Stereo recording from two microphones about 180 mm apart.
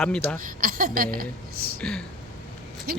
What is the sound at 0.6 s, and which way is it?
Speech, 50° right (ahead or behind).